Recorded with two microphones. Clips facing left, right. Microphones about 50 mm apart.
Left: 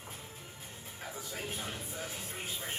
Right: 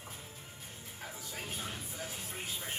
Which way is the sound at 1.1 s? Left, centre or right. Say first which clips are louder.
Left 3 dB; left.